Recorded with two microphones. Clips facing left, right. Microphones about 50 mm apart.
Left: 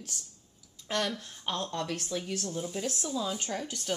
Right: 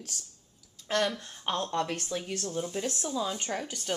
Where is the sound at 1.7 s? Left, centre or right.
Centre.